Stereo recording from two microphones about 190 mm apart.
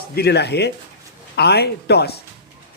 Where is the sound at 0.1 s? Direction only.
60° left (ahead or behind).